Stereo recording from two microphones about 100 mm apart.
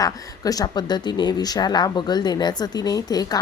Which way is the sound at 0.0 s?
40° left (ahead or behind).